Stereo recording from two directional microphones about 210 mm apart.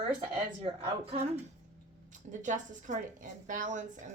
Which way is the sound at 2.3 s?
35° right (ahead or behind).